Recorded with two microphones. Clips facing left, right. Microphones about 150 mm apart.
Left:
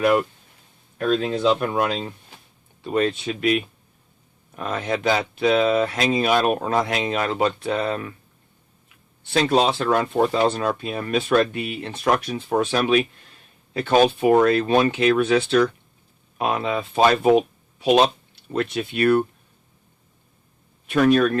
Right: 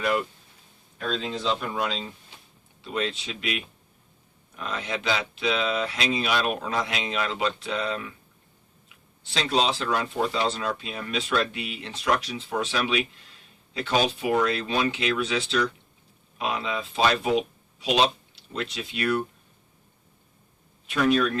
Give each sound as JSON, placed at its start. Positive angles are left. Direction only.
{"t": 0.9, "sound": "speech", "side_deg": 55}
{"t": 9.2, "sound": "speech", "side_deg": 50}
{"t": 20.8, "sound": "speech", "side_deg": 55}